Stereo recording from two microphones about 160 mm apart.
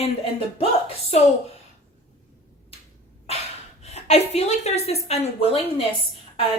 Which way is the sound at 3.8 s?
40° left (ahead or behind).